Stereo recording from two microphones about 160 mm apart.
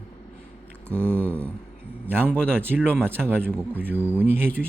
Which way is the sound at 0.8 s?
15° right (ahead or behind).